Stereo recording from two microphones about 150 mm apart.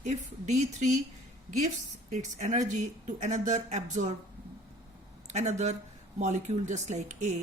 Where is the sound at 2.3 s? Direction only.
55° right (ahead or behind).